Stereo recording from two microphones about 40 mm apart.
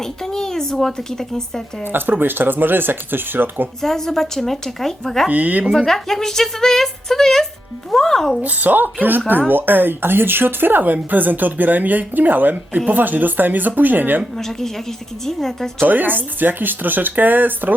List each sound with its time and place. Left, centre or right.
0.0 s a woman's voice: centre
1.8 s speech: right
3.8 s a woman's voice: centre
5.3 s a woman's voice: right
5.7 s a woman's voice: centre
8.4 s speech: right
14.3 s a woman's voice: centre
15.8 s speech: right